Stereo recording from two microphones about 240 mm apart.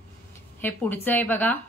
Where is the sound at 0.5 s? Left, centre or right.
Centre.